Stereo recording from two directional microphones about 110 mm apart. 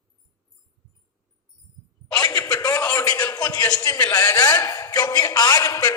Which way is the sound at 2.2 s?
35° left (ahead or behind).